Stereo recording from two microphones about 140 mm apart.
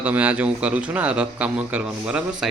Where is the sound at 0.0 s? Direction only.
10° right (ahead or behind).